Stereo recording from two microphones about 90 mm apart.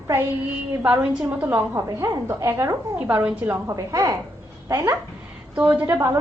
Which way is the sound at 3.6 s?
40° right (ahead or behind).